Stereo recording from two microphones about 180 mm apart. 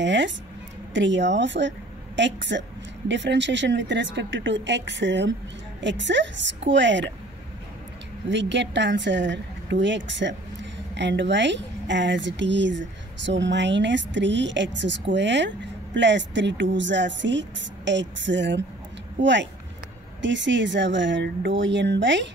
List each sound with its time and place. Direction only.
0.0 s music: 80° right
0.9 s speech: 90° right
5.8 s speech: 90° right
8.3 s speech: 80° right
11.0 s speech: 80° right
19.2 s speech: 90° right